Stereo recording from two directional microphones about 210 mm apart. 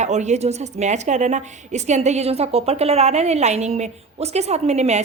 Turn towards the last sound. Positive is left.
turn(degrees=-30)  # may be behind; listen again after turning